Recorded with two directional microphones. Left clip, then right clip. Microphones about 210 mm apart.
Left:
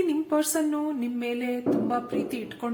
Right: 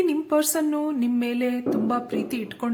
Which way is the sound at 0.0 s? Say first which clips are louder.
Right 3 dB; 40° right (ahead or behind).